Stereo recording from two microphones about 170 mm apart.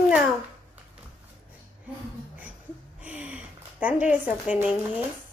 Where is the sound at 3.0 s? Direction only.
5° right (ahead or behind).